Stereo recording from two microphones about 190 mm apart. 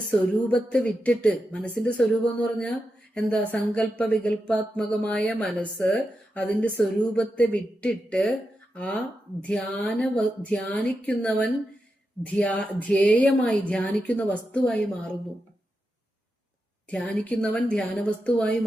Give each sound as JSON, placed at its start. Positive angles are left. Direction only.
{"t": 0.4, "sound": "a woman's voice", "side_deg": 5}
{"t": 16.9, "sound": "speech", "side_deg": 5}